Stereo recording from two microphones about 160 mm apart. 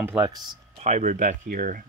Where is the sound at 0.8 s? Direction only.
45° right (ahead or behind).